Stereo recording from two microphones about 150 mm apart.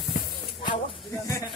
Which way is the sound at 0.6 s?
35° left (ahead or behind).